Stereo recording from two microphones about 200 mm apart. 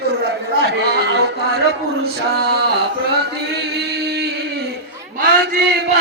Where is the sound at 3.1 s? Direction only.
55° right (ahead or behind).